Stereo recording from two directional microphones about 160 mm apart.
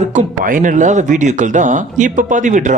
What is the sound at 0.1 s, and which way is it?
Speech, 55° right (ahead or behind).